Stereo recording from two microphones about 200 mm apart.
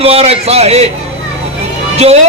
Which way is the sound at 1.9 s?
30° right (ahead or behind).